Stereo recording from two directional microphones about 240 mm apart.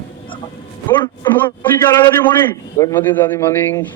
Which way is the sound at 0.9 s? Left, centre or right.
Centre.